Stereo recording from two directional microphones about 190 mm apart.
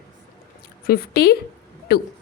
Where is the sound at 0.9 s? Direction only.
55° left (ahead or behind).